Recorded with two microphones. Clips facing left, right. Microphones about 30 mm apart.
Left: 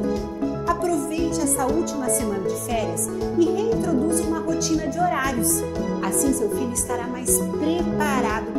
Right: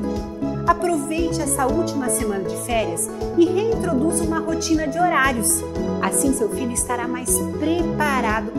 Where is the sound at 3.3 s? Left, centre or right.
Right.